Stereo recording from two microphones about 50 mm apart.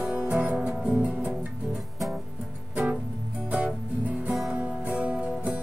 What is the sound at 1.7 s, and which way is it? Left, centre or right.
Music, centre.